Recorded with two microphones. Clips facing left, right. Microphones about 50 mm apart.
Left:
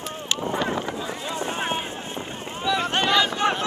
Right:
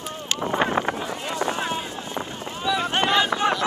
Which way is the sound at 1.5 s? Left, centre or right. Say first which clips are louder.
Even; left.